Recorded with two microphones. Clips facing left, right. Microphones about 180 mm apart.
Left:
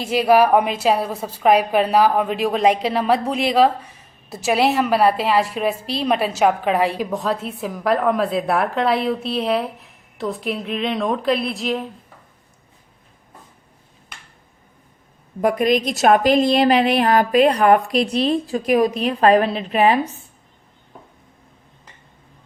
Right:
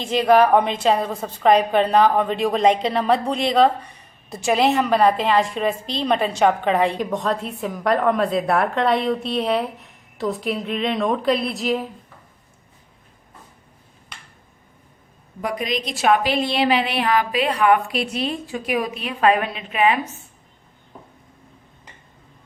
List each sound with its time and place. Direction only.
0.0 s a woman's voice: 10° left (ahead or behind)
15.4 s a woman's voice: 50° left (ahead or behind); by 20.1 s 35° left (ahead or behind)